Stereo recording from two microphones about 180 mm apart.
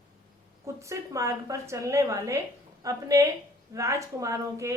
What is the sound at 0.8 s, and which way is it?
A woman's voice, 15° right (ahead or behind).